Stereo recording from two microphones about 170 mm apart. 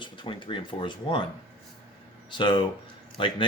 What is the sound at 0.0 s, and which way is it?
Speech, 30° left (ahead or behind).